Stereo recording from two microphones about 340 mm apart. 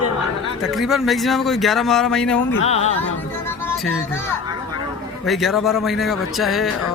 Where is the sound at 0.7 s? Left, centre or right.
Centre.